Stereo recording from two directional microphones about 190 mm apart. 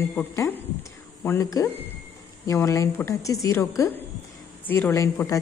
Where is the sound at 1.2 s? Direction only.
15° left (ahead or behind).